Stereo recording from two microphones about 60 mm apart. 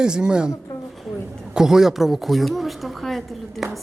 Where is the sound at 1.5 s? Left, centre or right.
Centre.